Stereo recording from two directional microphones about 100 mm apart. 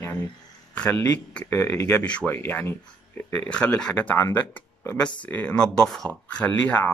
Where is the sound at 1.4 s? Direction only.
25° left (ahead or behind).